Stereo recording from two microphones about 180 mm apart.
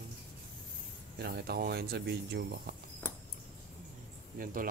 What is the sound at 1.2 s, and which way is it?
Speech, 65° right (ahead or behind).